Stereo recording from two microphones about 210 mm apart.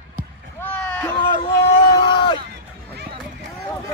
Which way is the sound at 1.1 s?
25° left (ahead or behind).